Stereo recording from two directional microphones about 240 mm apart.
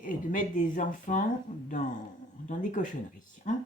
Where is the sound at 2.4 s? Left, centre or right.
Left.